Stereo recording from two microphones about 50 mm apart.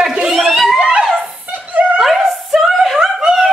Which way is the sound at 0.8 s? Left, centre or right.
Right.